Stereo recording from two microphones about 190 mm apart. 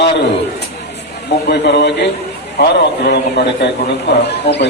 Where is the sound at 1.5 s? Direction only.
60° left (ahead or behind).